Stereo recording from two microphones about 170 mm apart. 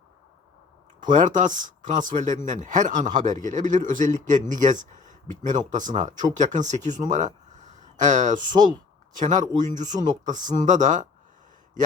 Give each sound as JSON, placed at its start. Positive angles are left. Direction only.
{"t": 1.0, "sound": "speech", "side_deg": -50}